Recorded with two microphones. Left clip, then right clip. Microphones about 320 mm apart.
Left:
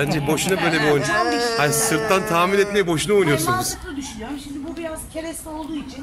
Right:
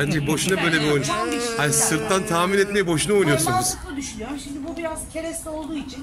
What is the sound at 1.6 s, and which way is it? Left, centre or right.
Speech, centre.